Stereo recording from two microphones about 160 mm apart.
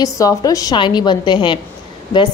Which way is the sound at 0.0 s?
20° left (ahead or behind).